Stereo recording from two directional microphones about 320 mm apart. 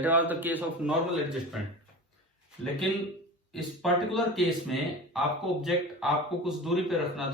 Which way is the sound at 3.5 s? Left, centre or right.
Centre.